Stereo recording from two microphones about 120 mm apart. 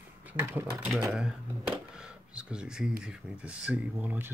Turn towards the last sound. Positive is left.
turn(degrees=-15)  # may be behind; listen again after turning